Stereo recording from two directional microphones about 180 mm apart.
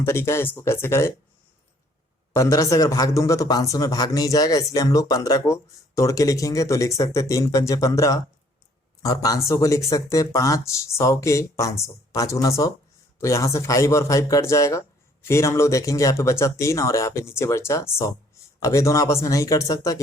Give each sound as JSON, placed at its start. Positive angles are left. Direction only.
{"t": 0.0, "sound": "speech", "side_deg": 15}
{"t": 2.3, "sound": "speech", "side_deg": 15}